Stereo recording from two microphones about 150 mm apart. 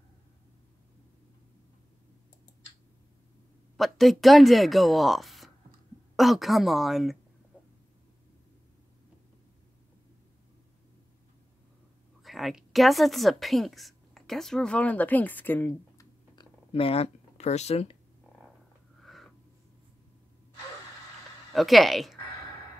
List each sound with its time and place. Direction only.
3.7 s a woman's voice: centre (ahead or behind)
12.2 s a woman's voice: centre (ahead or behind)
16.3 s a sound: 40° left (ahead or behind)
21.5 s a woman's voice: centre (ahead or behind)